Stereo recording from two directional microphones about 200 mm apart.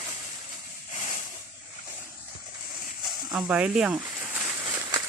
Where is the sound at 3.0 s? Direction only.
5° right (ahead or behind).